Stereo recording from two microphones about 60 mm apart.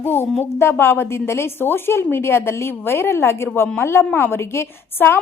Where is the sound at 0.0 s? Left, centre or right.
Left.